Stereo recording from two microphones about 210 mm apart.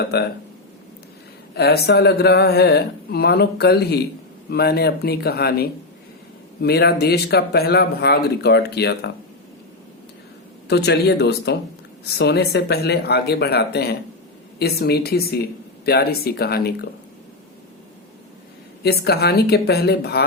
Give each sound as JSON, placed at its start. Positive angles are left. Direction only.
{"t": 0.0, "sound": "speech", "side_deg": 50}
{"t": 1.5, "sound": "speech", "side_deg": 50}
{"t": 10.7, "sound": "speech", "side_deg": 50}
{"t": 18.8, "sound": "speech", "side_deg": 50}